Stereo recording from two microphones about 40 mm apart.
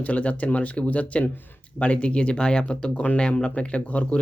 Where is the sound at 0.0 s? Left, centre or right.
Left.